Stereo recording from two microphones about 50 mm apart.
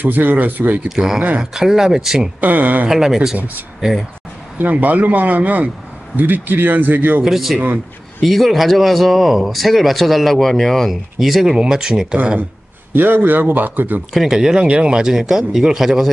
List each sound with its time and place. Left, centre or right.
0.0 s speech: right
0.8 s speech: centre
2.4 s speech: right
2.9 s speech: centre
3.3 s speech: right
7.2 s speech: centre
11.1 s speech: centre
12.2 s speech: right
14.1 s speech: centre